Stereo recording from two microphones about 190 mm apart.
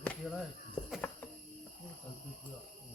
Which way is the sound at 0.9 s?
10° left (ahead or behind).